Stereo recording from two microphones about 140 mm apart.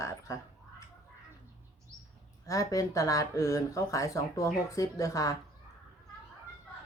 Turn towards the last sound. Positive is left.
turn(degrees=25)  # may be behind; listen again after turning